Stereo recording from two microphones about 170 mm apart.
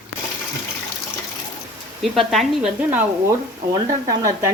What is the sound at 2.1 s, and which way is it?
Speech, centre (ahead or behind).